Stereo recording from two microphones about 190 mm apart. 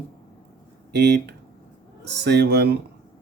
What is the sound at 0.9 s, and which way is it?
Speech, 60° right (ahead or behind).